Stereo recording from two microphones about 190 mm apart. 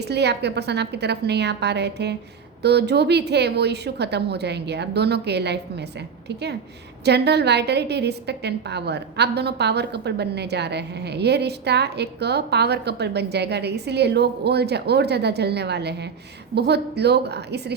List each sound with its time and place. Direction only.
0.1 s a woman's voice: 60° right (ahead or behind)